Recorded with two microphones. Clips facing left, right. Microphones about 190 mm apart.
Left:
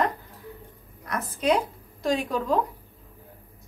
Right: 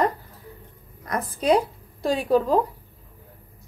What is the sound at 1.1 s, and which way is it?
A woman's voice, 35° right (ahead or behind).